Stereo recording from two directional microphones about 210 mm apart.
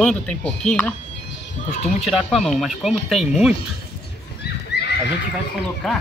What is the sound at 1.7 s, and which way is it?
Speech, 35° left (ahead or behind).